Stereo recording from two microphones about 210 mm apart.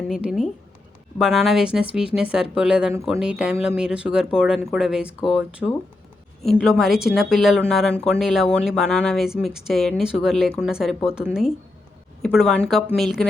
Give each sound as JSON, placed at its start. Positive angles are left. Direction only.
{"t": 0.1, "sound": "speech", "side_deg": 0}